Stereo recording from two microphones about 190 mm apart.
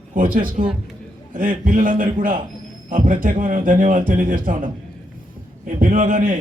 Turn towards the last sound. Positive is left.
turn(degrees=-45)  # may be behind; listen again after turning